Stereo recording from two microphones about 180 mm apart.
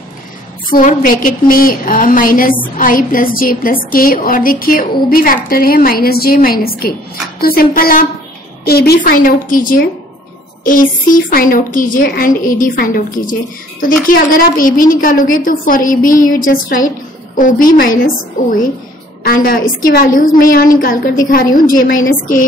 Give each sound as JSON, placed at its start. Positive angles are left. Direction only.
{"t": 0.7, "sound": "a woman's voice", "side_deg": 50}
{"t": 19.2, "sound": "a woman's voice", "side_deg": 55}